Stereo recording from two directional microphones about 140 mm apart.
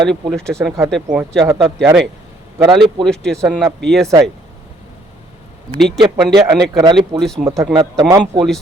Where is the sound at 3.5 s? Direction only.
10° right (ahead or behind).